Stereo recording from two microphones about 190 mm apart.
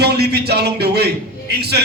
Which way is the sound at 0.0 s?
60° right (ahead or behind).